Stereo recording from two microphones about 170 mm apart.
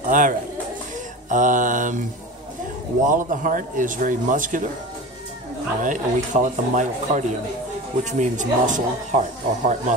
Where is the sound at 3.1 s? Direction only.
50° right (ahead or behind).